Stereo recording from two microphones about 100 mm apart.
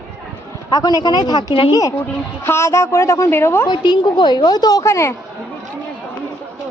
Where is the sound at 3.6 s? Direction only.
45° left (ahead or behind).